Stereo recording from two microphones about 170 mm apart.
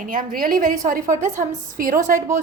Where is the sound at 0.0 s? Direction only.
55° right (ahead or behind).